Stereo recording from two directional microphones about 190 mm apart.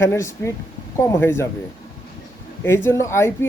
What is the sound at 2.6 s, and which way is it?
Speech, 15° left (ahead or behind).